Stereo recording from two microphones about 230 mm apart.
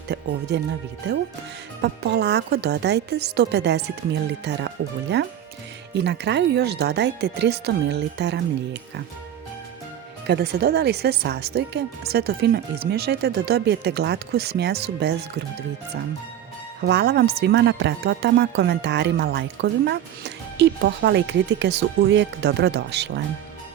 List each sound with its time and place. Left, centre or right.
0.1 s speech: right
1.8 s speech: right
10.2 s speech: right
16.8 s speech: right